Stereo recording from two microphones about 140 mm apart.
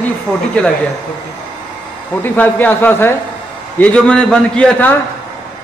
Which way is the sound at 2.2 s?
10° left (ahead or behind).